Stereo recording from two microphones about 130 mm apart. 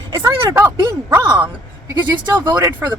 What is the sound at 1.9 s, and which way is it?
Speech, 35° right (ahead or behind).